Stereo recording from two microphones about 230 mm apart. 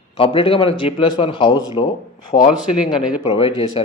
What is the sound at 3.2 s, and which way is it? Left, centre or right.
Speech, left.